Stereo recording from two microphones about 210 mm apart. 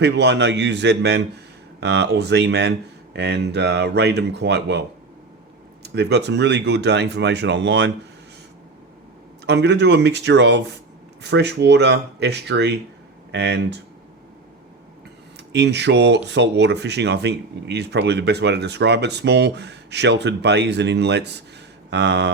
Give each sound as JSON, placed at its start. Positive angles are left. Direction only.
{"t": 0.0, "sound": "speech", "side_deg": -55}
{"t": 5.8, "sound": "speech", "side_deg": -55}
{"t": 9.5, "sound": "speech", "side_deg": -55}
{"t": 15.5, "sound": "speech", "side_deg": -55}
{"t": 21.8, "sound": "mantra", "side_deg": -55}